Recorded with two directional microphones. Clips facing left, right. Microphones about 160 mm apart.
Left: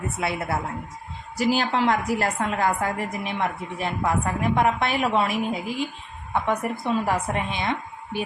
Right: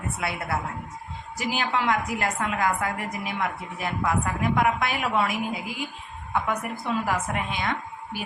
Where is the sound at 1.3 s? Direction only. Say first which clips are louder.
Left 5 dB; 35° left (ahead or behind).